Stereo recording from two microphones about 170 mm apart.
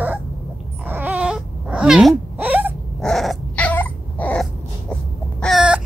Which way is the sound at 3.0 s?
Centre (ahead or behind).